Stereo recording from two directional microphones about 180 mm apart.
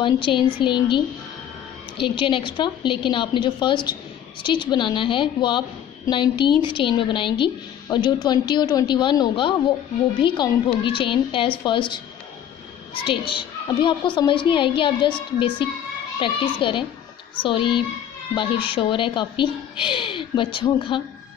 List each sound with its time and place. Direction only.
0.0 s a woman's voice: 25° left (ahead or behind)
16.2 s a woman's voice: 30° left (ahead or behind)